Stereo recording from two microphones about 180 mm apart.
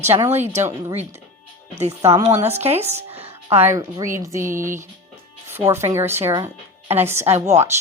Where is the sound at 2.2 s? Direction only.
35° right (ahead or behind).